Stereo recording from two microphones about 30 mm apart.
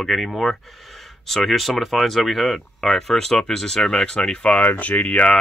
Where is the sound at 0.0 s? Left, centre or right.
Centre.